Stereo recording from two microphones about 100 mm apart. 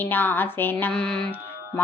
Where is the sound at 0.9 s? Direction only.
10° left (ahead or behind).